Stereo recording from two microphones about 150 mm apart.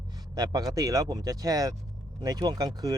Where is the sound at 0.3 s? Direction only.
25° right (ahead or behind).